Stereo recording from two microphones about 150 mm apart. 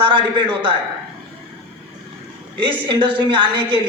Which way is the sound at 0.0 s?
35° right (ahead or behind).